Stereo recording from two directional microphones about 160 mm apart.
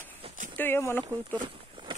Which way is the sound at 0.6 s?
15° left (ahead or behind).